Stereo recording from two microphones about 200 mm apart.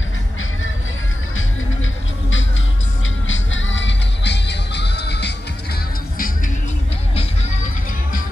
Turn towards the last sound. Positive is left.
turn(degrees=45)  # may be behind; listen again after turning